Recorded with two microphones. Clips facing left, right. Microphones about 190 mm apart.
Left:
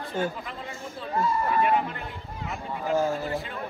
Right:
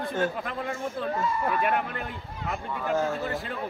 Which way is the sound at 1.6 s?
55° right (ahead or behind).